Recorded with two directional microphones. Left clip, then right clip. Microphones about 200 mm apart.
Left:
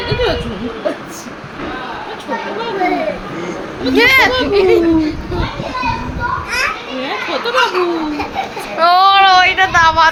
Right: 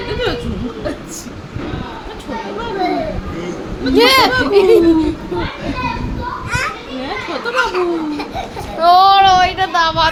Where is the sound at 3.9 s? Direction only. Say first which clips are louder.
Left 1 dB; 15° right (ahead or behind).